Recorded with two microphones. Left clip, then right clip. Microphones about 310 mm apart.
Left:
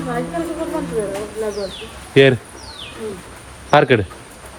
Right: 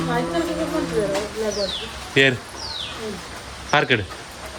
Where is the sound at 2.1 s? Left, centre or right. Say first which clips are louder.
Left 5 dB; centre.